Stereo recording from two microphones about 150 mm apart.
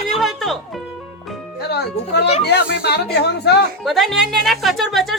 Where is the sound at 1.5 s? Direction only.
90° left.